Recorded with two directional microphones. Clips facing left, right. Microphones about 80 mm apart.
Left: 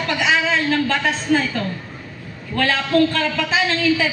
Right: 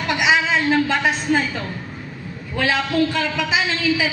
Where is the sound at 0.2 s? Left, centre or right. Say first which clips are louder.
Right 1 dB; centre.